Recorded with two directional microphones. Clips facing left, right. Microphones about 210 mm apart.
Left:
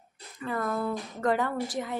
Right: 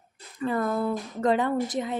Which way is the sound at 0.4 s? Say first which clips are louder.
Right 4 dB; 30° right (ahead or behind).